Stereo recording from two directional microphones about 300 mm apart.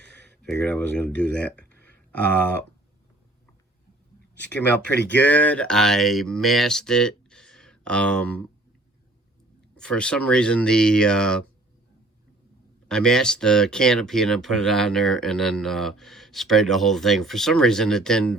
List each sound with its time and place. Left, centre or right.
0.0 s a sound: right
0.4 s speech: centre
5.1 s speech: centre
9.7 s speech: centre
12.9 s speech: centre